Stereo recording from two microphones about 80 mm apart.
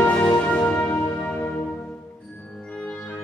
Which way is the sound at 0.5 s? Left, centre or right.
Centre.